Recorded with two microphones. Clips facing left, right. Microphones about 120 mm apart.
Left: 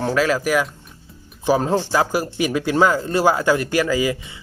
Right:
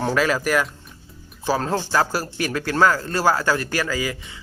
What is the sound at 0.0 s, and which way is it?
Speech, centre (ahead or behind).